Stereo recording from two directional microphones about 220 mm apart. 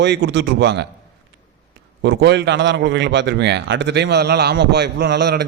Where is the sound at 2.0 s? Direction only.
50° right (ahead or behind).